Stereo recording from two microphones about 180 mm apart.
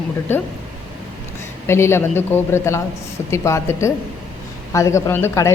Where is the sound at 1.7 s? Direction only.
15° left (ahead or behind).